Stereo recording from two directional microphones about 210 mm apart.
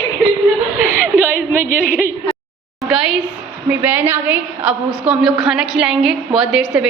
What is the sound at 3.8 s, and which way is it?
A woman's voice, 10° right (ahead or behind).